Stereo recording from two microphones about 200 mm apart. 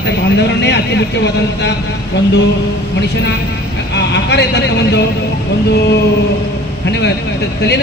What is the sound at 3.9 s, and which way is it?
Speech, 60° left (ahead or behind).